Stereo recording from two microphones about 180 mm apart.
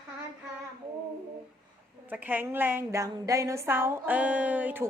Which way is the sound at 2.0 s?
10° right (ahead or behind).